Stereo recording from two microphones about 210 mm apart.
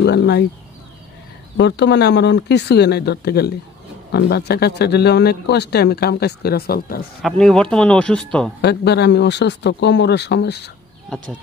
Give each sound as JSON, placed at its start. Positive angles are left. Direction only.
{"t": 0.0, "sound": "a man's voice", "side_deg": 50}
{"t": 1.6, "sound": "a man's voice", "side_deg": 55}
{"t": 7.2, "sound": "a man's voice", "side_deg": 0}
{"t": 8.5, "sound": "a man's voice", "side_deg": 50}